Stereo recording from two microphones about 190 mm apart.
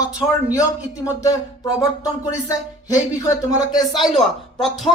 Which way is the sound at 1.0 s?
15° left (ahead or behind).